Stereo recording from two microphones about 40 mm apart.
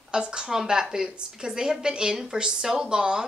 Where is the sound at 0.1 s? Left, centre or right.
Right.